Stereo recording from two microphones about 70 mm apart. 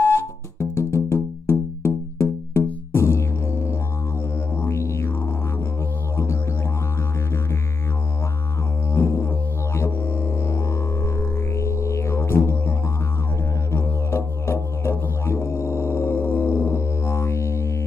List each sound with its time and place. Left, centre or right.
0.0 s music: left
8.9 s music: left